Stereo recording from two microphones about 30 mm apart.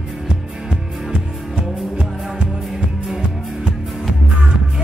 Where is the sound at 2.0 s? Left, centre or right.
Centre.